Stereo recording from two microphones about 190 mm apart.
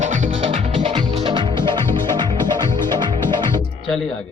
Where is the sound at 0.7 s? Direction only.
25° right (ahead or behind).